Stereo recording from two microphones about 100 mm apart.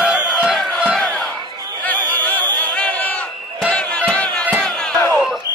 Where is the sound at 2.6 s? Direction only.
10° left (ahead or behind).